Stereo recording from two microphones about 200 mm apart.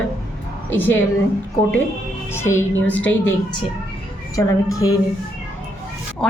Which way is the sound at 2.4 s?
10° left (ahead or behind).